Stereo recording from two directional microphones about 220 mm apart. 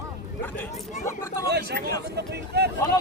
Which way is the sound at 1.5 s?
50° right (ahead or behind).